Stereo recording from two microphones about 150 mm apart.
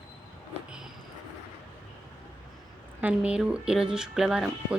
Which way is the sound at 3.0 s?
10° right (ahead or behind).